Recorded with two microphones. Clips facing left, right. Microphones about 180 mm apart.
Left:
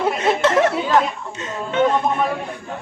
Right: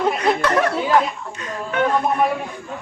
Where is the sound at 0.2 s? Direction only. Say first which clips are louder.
Left 2 dB; 25° left (ahead or behind).